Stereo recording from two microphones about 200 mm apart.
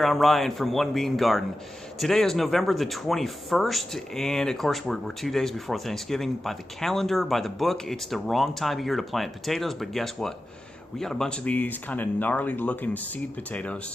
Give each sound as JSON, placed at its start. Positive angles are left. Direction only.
{"t": 0.0, "sound": "speech", "side_deg": 0}